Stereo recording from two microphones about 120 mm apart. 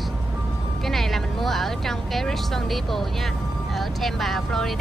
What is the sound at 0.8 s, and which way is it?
Speech, centre (ahead or behind).